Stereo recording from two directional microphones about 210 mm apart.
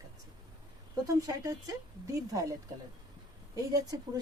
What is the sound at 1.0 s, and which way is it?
Speech, 15° right (ahead or behind).